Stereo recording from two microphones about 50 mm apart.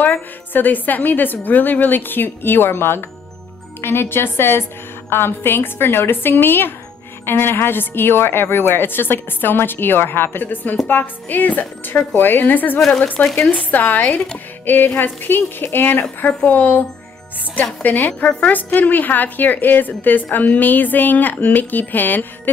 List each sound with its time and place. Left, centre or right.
0.5 s a woman's voice: left
12.7 s speech: centre
13.5 s speech: left
14.7 s a woman's voice: left
17.8 s a woman's voice: left
18.2 s speech: left
18.5 s a woman's voice: left